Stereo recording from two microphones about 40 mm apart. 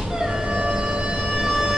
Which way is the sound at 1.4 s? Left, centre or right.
Centre.